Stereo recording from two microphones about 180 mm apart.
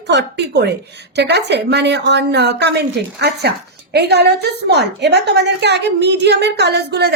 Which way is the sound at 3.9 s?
65° right (ahead or behind).